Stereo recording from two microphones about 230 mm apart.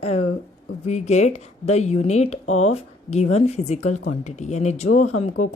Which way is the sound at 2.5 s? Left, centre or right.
Left.